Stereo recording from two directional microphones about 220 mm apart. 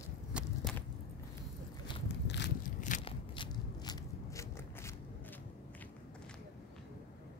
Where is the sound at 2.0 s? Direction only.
50° left (ahead or behind).